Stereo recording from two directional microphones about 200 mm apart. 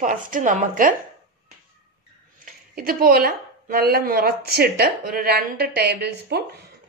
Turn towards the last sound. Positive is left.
turn(degrees=-50)  # may be behind; listen again after turning